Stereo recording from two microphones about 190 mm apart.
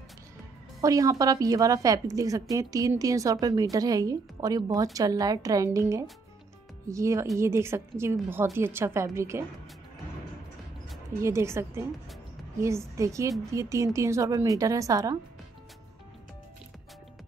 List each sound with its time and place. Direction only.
0.7 s a woman's voice: 15° right (ahead or behind)
11.2 s a woman's voice: 15° right (ahead or behind)